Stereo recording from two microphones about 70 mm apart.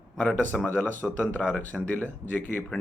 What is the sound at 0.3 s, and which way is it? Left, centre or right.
Speech, left.